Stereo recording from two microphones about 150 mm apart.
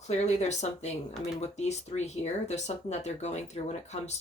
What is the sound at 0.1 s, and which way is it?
Speech, 50° left (ahead or behind).